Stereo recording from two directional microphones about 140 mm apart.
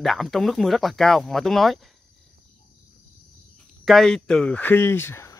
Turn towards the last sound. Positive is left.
turn(degrees=20)  # may be behind; listen again after turning